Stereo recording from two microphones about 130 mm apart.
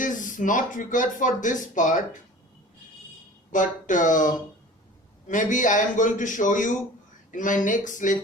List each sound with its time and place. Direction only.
0.0 s speech: 85° left
3.5 s speech: 80° left
5.3 s speech: 80° left